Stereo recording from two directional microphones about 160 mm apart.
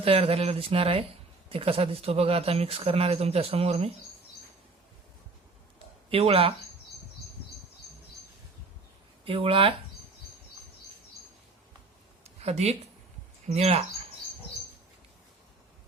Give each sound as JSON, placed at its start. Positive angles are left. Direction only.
{"t": 0.0, "sound": "speech", "side_deg": -35}
{"t": 6.1, "sound": "speech", "side_deg": -35}
{"t": 9.2, "sound": "speech", "side_deg": -35}
{"t": 12.2, "sound": "a sound", "side_deg": -40}
{"t": 13.5, "sound": "speech", "side_deg": -40}